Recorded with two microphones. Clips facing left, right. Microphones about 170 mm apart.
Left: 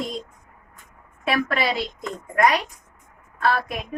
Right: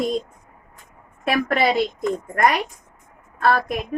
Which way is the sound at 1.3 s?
50° right (ahead or behind).